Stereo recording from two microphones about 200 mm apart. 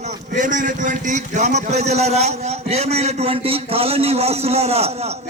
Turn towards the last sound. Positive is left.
turn(degrees=-30)  # may be behind; listen again after turning